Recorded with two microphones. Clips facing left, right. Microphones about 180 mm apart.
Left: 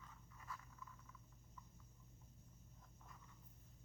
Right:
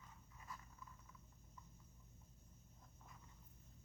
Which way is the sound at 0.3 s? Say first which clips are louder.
Left 1 dB; 20° right (ahead or behind).